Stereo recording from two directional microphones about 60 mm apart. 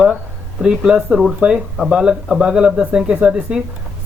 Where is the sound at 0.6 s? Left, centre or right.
Centre.